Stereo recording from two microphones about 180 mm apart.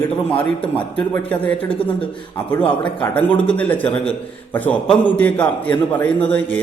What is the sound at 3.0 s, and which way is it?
A man's voice, 10° left (ahead or behind).